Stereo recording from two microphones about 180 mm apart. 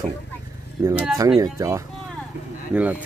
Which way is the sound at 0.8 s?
15° right (ahead or behind).